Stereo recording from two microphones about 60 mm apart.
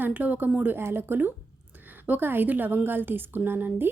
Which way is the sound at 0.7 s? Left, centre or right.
Right.